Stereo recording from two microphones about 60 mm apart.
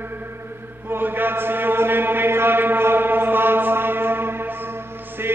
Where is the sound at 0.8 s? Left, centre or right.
Right.